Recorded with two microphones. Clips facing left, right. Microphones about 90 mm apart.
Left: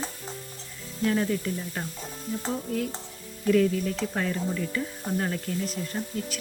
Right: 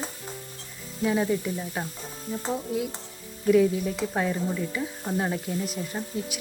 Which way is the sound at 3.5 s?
10° right (ahead or behind).